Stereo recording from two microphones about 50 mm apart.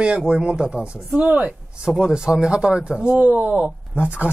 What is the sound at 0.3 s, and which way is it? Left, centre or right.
Speech, centre.